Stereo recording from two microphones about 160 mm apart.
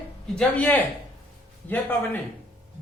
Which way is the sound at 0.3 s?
10° left (ahead or behind).